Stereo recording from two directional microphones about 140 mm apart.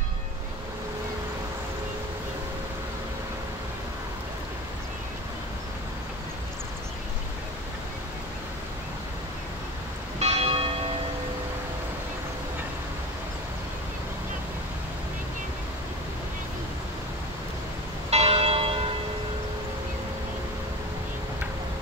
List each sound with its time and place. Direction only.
10.1 s church bell: 45° right (ahead or behind)
18.1 s church bell: 45° right (ahead or behind)